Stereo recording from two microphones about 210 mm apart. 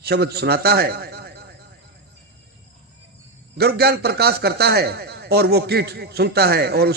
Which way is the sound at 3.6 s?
50° right (ahead or behind).